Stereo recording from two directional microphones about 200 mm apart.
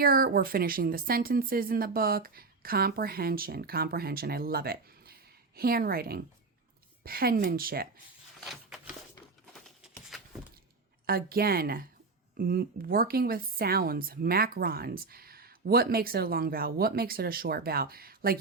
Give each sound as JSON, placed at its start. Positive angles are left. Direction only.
{"t": 0.0, "sound": "speech", "side_deg": -50}
{"t": 9.5, "sound": "a sound", "side_deg": 0}
{"t": 11.0, "sound": "speech", "side_deg": -50}